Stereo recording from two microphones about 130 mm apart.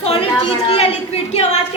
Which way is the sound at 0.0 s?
50° left (ahead or behind).